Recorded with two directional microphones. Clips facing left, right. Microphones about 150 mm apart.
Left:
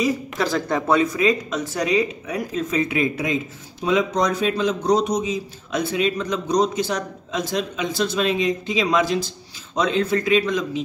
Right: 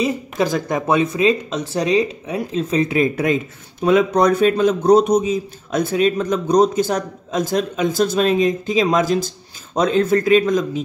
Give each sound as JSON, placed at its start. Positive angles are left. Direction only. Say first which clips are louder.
{"t": 0.0, "sound": "speech", "louder": "right 2 dB", "side_deg": -20}
{"t": 3.8, "sound": "a man's voice", "louder": "right 6 dB", "side_deg": -60}